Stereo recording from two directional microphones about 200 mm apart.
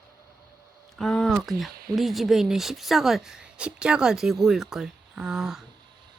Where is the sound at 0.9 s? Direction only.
5° left (ahead or behind).